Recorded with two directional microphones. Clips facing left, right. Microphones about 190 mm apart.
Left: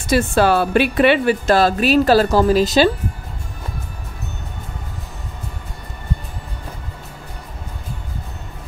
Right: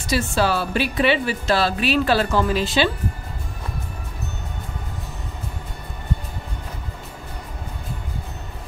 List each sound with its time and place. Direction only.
0.0 s speech: 55° left (ahead or behind)